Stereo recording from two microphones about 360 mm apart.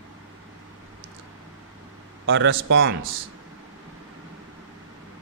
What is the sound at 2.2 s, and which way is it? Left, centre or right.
Speech, right.